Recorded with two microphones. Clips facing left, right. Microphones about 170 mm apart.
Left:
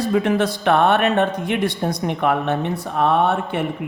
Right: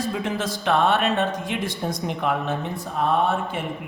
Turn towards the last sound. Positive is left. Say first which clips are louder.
# left 4 dB
turn(degrees=65)  # may be behind; listen again after turning